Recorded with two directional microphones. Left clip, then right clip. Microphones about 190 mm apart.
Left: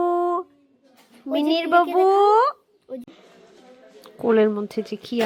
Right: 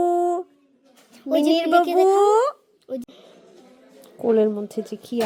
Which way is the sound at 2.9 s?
55° right (ahead or behind).